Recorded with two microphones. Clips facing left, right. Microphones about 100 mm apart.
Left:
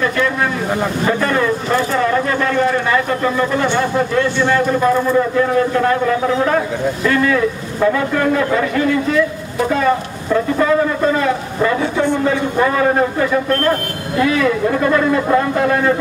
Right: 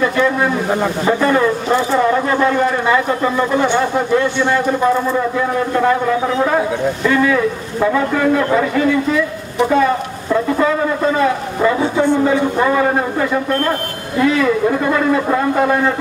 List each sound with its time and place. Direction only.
1.0 s a man's voice: 20° right (ahead or behind)
7.1 s a man's voice: 5° right (ahead or behind)
11.6 s speech: 10° right (ahead or behind)
14.1 s a man's voice: 5° right (ahead or behind)